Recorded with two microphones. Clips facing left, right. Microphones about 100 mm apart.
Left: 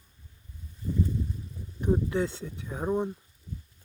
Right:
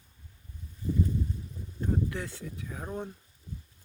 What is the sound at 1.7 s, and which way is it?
Speech, 20° left (ahead or behind).